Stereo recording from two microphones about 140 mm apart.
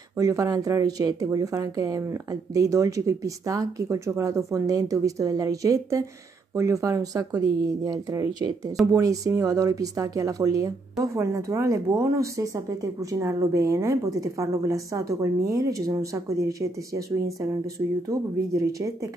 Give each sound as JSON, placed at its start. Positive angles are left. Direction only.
{"t": 0.2, "sound": "speech", "side_deg": -25}